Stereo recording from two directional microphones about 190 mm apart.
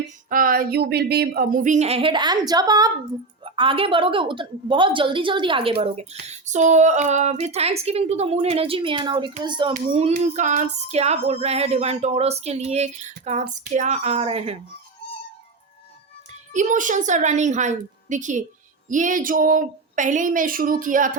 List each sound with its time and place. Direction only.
0.3 s a woman's voice: 45° right (ahead or behind); by 5.7 s 25° right (ahead or behind)
5.8 s female singing: 35° right (ahead or behind)
9.4 s a woman's voice: 25° right (ahead or behind)
9.9 s female singing: 40° right (ahead or behind)
16.5 s female singing: 40° right (ahead or behind)
18.9 s speech: 45° right (ahead or behind)